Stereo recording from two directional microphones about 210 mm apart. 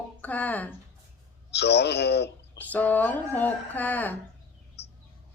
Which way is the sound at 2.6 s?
10° left (ahead or behind).